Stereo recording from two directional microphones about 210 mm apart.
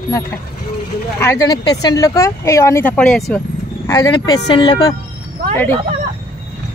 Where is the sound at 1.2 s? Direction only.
15° left (ahead or behind).